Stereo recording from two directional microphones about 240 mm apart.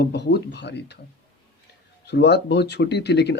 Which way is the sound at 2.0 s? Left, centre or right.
Left.